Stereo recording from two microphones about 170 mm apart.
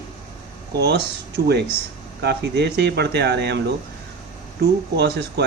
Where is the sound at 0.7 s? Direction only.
75° right (ahead or behind).